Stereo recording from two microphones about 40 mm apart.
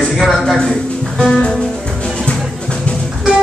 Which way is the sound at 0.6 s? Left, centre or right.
Left.